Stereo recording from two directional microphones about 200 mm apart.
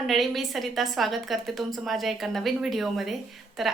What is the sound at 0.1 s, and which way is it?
Speech, centre (ahead or behind).